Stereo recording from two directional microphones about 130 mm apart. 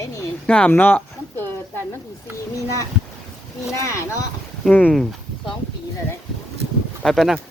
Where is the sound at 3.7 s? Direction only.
20° left (ahead or behind).